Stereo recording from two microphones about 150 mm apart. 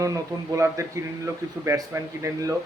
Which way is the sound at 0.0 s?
20° right (ahead or behind).